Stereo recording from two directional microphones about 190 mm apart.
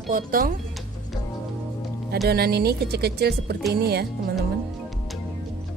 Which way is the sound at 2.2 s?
55° right (ahead or behind).